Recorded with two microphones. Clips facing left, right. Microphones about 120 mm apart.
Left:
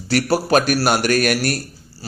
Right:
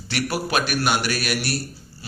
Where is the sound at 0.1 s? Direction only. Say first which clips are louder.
Left 8 dB; 40° left (ahead or behind).